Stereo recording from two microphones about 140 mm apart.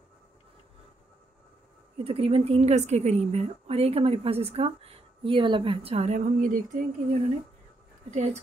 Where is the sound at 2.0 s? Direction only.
45° right (ahead or behind); by 6.8 s 70° right (ahead or behind).